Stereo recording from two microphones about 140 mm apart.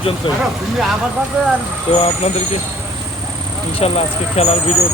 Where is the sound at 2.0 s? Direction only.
45° left (ahead or behind).